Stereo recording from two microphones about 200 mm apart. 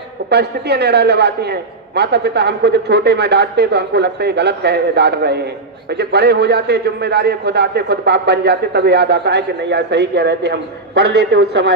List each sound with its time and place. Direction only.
0.3 s a man's voice: 55° right (ahead or behind)